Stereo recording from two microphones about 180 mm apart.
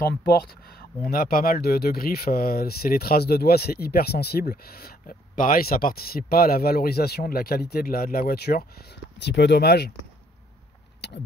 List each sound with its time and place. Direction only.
0.1 s speech: 60° left (ahead or behind)
9.2 s speech: 70° left (ahead or behind)
11.0 s a sound: 70° left (ahead or behind)